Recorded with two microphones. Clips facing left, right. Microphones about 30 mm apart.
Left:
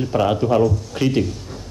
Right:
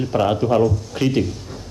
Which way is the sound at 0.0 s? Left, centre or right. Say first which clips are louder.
Even; centre.